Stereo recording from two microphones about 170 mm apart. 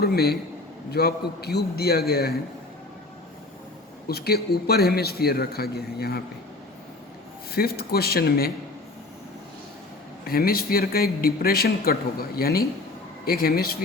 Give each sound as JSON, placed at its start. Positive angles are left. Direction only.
{"t": 0.0, "sound": "a man's voice", "side_deg": 65}
{"t": 4.1, "sound": "a man's voice", "side_deg": 70}
{"t": 7.5, "sound": "a man's voice", "side_deg": 65}
{"t": 10.2, "sound": "a man's voice", "side_deg": 60}